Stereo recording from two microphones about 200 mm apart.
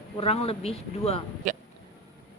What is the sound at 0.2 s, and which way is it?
A woman's voice, 30° left (ahead or behind).